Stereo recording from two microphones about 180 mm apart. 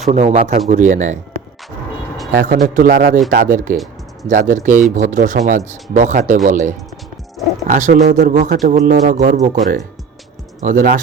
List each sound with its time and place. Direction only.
0.0 s speech: 35° right (ahead or behind)